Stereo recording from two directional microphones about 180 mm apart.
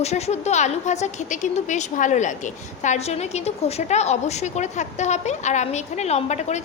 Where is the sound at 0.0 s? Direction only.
35° left (ahead or behind).